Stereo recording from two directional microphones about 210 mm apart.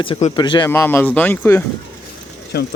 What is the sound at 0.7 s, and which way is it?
Speech, 10° left (ahead or behind).